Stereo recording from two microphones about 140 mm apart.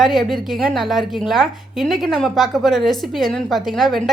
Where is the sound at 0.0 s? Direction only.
Centre (ahead or behind).